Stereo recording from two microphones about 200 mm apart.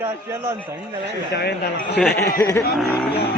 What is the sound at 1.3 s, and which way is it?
Speech, 55° left (ahead or behind).